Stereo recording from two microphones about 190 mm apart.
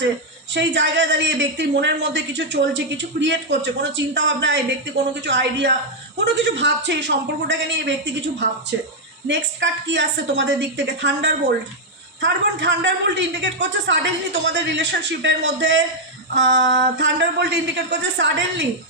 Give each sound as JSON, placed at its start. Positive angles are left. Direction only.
{"t": 0.5, "sound": "a man's voice", "side_deg": -70}